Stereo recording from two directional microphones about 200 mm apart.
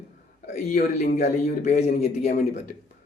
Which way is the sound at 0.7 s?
35° left (ahead or behind).